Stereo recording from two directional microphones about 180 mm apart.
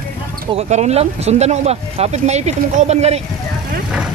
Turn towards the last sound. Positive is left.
turn(degrees=-35)  # may be behind; listen again after turning